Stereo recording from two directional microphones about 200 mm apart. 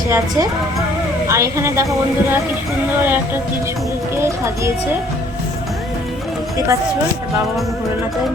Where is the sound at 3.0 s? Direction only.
10° right (ahead or behind).